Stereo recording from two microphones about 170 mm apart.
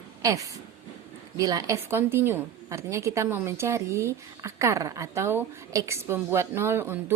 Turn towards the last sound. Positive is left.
turn(degrees=-15)  # may be behind; listen again after turning